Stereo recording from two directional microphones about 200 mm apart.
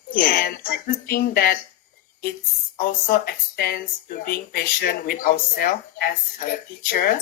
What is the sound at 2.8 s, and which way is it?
Speech, 50° left (ahead or behind).